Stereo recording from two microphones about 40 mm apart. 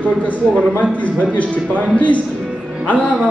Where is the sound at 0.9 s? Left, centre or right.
Left.